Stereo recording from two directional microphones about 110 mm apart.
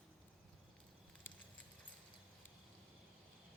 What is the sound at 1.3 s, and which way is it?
Horse, 20° left (ahead or behind).